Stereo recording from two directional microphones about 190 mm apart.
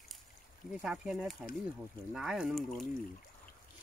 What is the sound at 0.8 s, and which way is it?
Speech, 5° right (ahead or behind).